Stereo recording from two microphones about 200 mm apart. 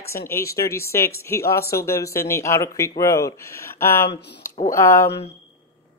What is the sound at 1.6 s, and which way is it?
Speech, 50° left (ahead or behind).